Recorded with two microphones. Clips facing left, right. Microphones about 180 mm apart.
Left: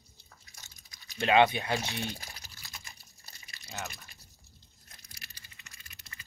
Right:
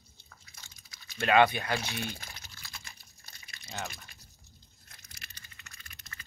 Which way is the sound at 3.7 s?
Centre (ahead or behind).